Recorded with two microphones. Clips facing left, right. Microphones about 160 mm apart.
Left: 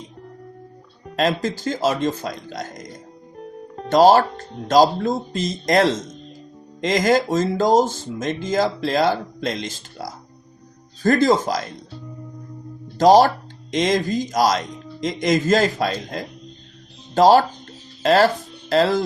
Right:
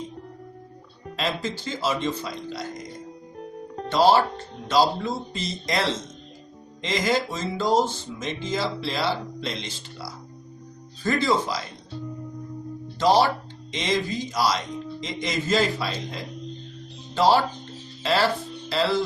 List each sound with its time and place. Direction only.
1.1 s speech: 45° left (ahead or behind)
3.3 s music: centre (ahead or behind)
3.8 s speech: 45° left (ahead or behind)
13.0 s speech: 45° left (ahead or behind)
17.2 s speech: 45° left (ahead or behind)